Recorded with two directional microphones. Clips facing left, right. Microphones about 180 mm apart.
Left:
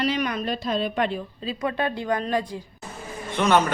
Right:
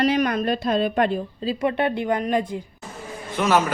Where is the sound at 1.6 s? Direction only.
25° right (ahead or behind).